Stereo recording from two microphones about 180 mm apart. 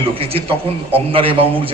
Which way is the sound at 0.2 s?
30° right (ahead or behind).